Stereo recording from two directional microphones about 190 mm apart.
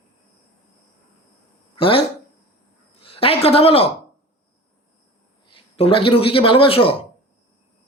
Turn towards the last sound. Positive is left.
turn(degrees=30)  # may be behind; listen again after turning